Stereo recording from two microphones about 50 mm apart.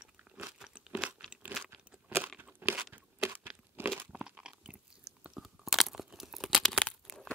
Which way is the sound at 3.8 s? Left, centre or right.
Right.